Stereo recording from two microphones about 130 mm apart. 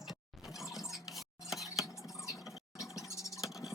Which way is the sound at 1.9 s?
25° left (ahead or behind).